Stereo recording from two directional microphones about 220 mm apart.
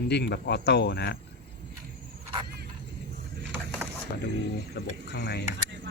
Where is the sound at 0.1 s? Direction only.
50° left (ahead or behind).